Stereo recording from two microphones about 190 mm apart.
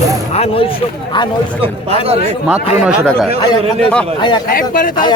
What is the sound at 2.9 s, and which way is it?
Speech, 5° right (ahead or behind).